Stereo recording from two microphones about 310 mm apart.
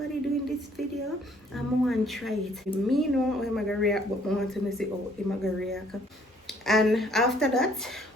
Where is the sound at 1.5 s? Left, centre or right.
Centre.